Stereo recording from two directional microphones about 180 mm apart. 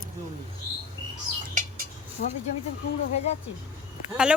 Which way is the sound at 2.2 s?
55° left (ahead or behind).